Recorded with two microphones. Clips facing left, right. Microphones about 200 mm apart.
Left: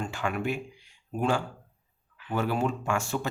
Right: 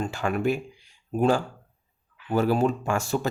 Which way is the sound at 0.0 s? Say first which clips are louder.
Right 5 dB; 40° right (ahead or behind).